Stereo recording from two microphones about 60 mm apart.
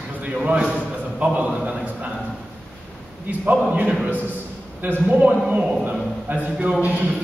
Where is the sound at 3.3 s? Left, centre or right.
Right.